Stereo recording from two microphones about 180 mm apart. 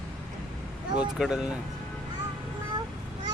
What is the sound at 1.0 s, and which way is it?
Speech, 5° right (ahead or behind).